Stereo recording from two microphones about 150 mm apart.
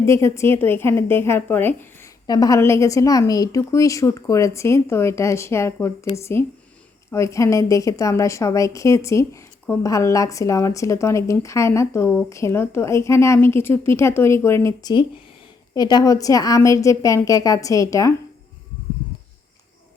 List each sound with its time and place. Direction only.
0.0 s a woman's voice: 20° left (ahead or behind)
2.2 s a woman's voice: 25° left (ahead or behind)